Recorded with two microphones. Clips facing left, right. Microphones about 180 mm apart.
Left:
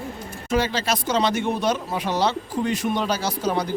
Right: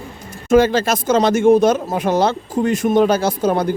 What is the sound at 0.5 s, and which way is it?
Speech, 50° right (ahead or behind).